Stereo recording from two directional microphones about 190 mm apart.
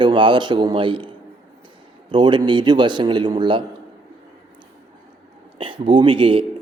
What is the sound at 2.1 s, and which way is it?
A man's voice, 25° right (ahead or behind).